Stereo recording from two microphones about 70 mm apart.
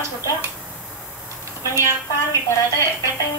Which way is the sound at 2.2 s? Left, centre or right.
Left.